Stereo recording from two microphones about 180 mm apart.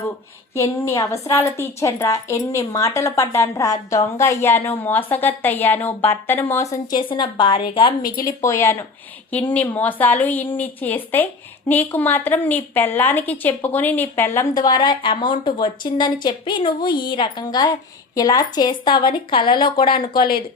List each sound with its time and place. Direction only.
0.5 s a woman's voice: 15° left (ahead or behind)
7.1 s speech: 30° left (ahead or behind)
8.1 s a woman's voice: 20° left (ahead or behind)
20.1 s speech: 55° left (ahead or behind)